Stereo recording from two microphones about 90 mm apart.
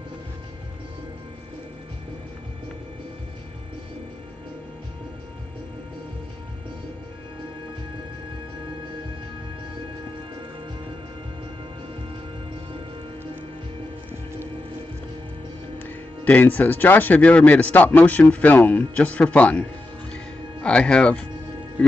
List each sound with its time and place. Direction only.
15.8 s speech: 20° left (ahead or behind)